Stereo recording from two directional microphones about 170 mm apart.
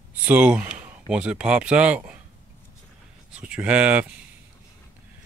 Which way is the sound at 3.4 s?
5° right (ahead or behind).